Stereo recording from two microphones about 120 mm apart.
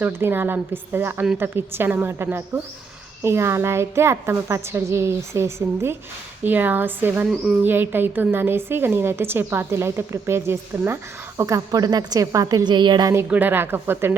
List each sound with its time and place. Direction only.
0.0 s a woman's voice: 20° right (ahead or behind)
7.3 s speech: centre (ahead or behind)
7.6 s a woman's voice: 15° right (ahead or behind); by 13.1 s 35° right (ahead or behind)
13.1 s a woman's voice: 15° right (ahead or behind)